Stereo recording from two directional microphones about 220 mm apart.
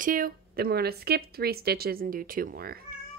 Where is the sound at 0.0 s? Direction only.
40° right (ahead or behind).